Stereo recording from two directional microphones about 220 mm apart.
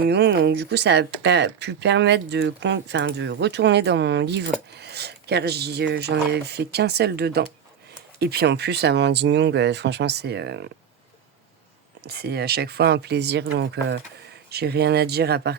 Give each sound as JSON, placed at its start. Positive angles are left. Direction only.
{"t": 0.0, "sound": "speech", "side_deg": -50}
{"t": 12.0, "sound": "speech", "side_deg": -45}